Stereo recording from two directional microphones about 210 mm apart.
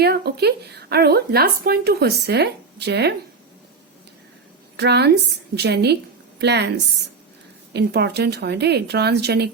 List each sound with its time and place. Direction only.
0.0 s speech: 50° right (ahead or behind)
4.8 s speech: 50° right (ahead or behind)